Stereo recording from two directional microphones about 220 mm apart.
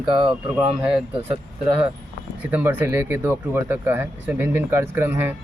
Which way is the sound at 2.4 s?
5° right (ahead or behind).